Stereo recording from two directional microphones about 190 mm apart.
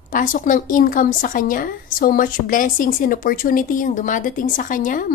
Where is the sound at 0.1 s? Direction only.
45° left (ahead or behind).